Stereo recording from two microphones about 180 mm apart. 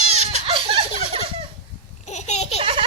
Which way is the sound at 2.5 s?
30° right (ahead or behind).